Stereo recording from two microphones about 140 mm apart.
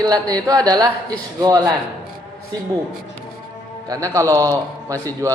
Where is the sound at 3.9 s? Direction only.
25° right (ahead or behind).